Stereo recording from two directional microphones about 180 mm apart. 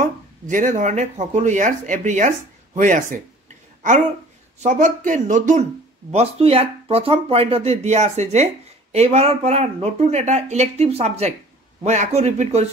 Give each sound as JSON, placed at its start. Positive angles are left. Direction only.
{"t": 0.0, "sound": "speech", "side_deg": -45}
{"t": 6.1, "sound": "speech", "side_deg": -30}